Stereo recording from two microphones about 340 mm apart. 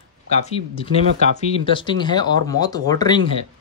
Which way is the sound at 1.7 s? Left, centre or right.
Centre.